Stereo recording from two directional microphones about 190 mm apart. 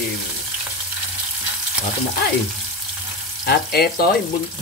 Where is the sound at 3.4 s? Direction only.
55° left (ahead or behind).